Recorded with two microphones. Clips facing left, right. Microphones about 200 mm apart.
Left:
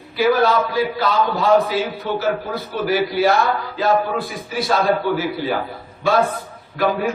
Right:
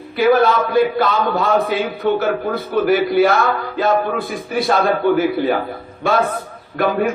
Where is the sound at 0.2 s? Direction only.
55° right (ahead or behind).